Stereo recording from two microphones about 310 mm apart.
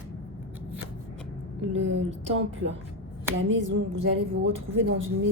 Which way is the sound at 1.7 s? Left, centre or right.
Right.